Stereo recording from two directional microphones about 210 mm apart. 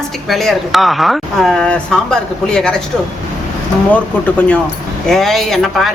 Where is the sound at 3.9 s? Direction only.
5° left (ahead or behind).